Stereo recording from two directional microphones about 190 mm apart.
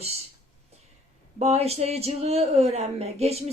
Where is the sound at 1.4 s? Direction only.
35° right (ahead or behind).